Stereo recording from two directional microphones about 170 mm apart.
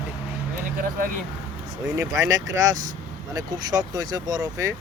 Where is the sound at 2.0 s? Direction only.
20° right (ahead or behind).